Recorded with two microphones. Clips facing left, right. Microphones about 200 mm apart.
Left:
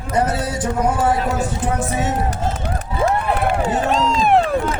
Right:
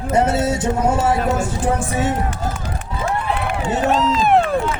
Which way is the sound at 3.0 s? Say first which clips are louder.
Left 3 dB; 40° left (ahead or behind).